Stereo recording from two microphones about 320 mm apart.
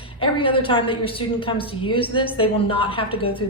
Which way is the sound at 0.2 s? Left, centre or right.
Centre.